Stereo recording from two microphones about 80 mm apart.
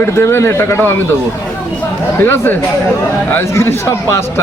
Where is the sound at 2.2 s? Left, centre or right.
Left.